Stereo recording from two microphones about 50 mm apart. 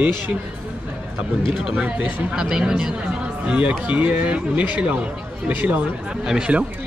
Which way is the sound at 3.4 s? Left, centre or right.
Right.